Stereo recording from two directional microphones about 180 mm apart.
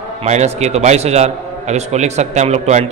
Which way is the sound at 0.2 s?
40° right (ahead or behind).